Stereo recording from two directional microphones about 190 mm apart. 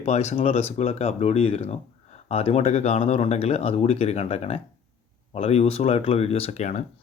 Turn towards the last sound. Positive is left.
turn(degrees=35)  # may be behind; listen again after turning